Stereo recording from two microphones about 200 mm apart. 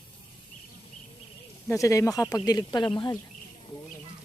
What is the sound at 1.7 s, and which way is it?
Speech, 15° left (ahead or behind).